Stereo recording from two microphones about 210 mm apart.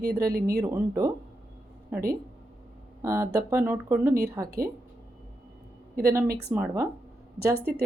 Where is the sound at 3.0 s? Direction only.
15° right (ahead or behind).